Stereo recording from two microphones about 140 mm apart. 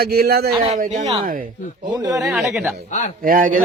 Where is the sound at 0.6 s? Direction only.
60° right (ahead or behind).